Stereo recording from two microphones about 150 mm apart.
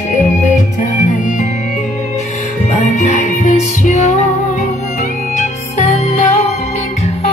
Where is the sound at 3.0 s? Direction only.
50° left (ahead or behind).